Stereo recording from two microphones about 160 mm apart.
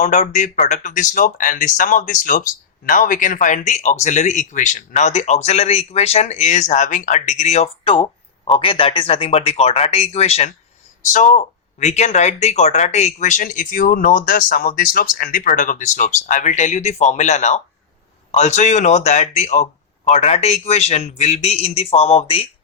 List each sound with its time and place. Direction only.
0.0 s a man's voice: 50° left (ahead or behind)